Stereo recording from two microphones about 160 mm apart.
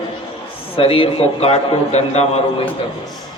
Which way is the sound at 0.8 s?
35° left (ahead or behind).